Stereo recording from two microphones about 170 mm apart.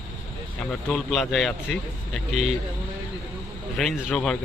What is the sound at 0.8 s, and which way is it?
Speech, 5° left (ahead or behind).